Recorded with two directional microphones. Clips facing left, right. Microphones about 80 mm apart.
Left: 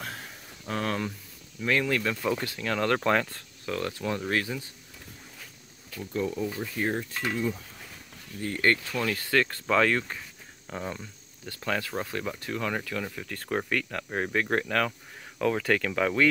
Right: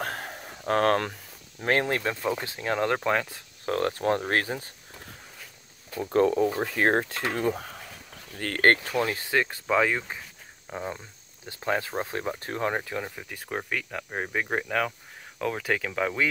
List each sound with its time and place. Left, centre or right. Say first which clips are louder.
0.0 s a sound: right 6 dB; right
1.6 s speech: right 1 dB; right
2.2 s speech: right 1 dB; right
3.0 s speech: left 1 dB; centre
3.6 s speech: right 6 dB; right
6.0 s speech: right 8 dB; right
8.4 s speech: right 1 dB; right
8.9 s speech: right 1 dB; right
11.6 s speech: right 3 dB; right
13.3 s speech: left 4 dB; centre